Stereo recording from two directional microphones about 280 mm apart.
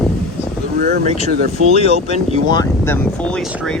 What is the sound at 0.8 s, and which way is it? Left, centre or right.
Speech, right.